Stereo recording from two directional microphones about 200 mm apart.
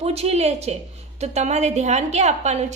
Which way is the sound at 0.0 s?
30° right (ahead or behind).